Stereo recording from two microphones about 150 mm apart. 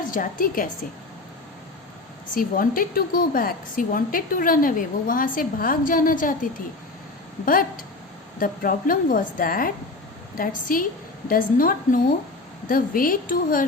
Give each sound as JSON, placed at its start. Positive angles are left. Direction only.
{"t": 0.1, "sound": "a woman's voice", "side_deg": 65}
{"t": 2.3, "sound": "a woman's voice", "side_deg": 70}